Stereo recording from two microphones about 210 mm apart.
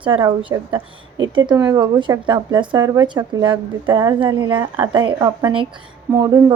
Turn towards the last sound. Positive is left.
turn(degrees=-15)  # may be behind; listen again after turning